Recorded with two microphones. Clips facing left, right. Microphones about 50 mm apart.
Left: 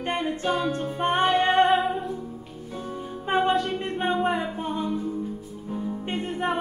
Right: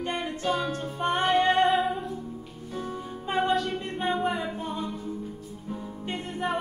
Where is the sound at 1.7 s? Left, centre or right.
Centre.